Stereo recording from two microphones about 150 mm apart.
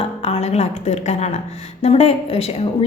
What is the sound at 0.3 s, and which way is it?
A woman's voice, 45° left (ahead or behind).